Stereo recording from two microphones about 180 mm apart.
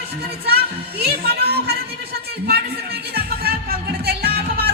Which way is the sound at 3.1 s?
60° right (ahead or behind).